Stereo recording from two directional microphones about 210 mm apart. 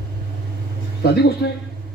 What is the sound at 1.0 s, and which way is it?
Speech, 50° left (ahead or behind).